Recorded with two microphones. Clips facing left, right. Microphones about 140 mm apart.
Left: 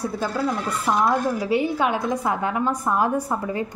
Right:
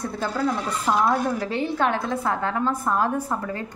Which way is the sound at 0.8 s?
5° left (ahead or behind).